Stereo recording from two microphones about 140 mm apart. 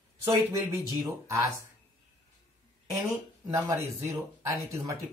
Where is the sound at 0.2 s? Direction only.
20° right (ahead or behind).